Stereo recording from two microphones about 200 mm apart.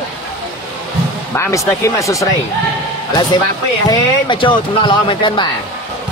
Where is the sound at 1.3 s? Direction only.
15° left (ahead or behind).